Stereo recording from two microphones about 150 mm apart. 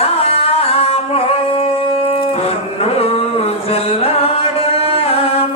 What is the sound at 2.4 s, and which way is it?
Music, 40° left (ahead or behind).